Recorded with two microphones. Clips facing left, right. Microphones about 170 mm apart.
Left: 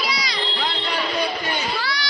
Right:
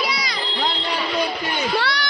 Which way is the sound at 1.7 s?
70° right (ahead or behind).